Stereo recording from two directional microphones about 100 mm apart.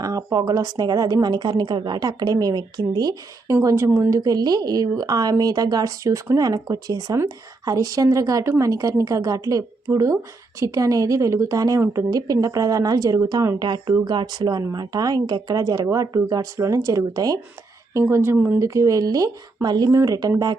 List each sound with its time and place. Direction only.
0.0 s a woman's voice: 35° right (ahead or behind)
3.5 s a woman's voice: 30° right (ahead or behind)
18.1 s speech: 25° right (ahead or behind)
18.6 s a woman's voice: 30° right (ahead or behind)
19.9 s a woman's voice: 35° right (ahead or behind)